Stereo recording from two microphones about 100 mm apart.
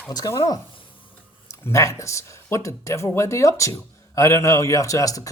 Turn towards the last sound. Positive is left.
turn(degrees=35)  # may be behind; listen again after turning